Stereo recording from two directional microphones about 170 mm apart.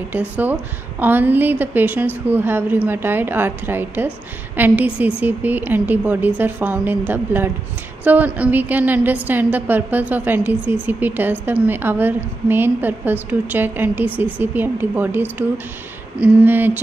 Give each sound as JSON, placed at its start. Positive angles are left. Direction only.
{"t": 0.1, "sound": "a woman's voice", "side_deg": -10}